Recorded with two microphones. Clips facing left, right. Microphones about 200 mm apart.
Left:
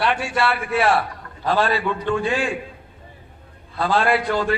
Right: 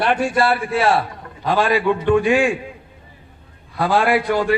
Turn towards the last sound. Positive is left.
turn(degrees=-15)  # may be behind; listen again after turning